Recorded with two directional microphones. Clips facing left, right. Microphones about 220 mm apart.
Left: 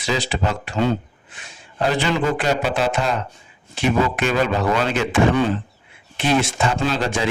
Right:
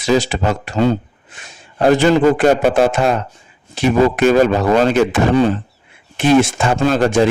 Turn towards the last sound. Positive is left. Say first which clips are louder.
# right 8 dB
turn(degrees=-50)  # may be behind; listen again after turning